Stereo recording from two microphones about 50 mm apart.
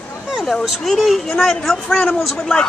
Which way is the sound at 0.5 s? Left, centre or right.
Centre.